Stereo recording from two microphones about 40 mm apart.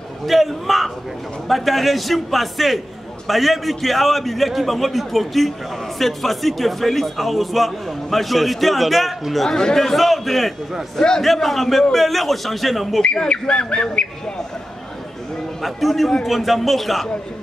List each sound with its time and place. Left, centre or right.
0.3 s speech: centre
9.5 s speech: centre
11.0 s a man's voice: centre
11.2 s speech: centre
13.0 s bird: left
15.6 s speech: centre